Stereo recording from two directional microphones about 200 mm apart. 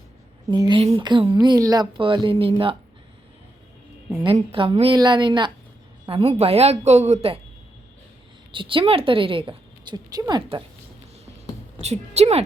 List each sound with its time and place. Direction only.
0.4 s a woman's voice: 20° right (ahead or behind)
4.1 s a woman's voice: 20° right (ahead or behind)
8.5 s a woman's voice: 25° right (ahead or behind)
11.8 s a woman's voice: 35° right (ahead or behind)